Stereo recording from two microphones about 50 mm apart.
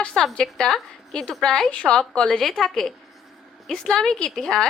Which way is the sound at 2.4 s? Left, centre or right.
Centre.